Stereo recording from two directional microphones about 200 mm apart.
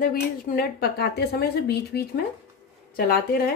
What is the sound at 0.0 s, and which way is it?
Speech, 45° left (ahead or behind).